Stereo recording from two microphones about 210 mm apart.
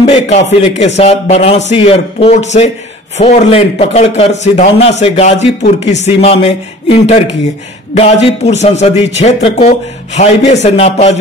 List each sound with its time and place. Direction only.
0.0 s a man's voice: 30° left (ahead or behind)